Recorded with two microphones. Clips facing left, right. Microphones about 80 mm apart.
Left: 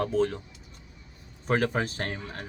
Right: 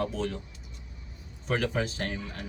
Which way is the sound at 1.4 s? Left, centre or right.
Left.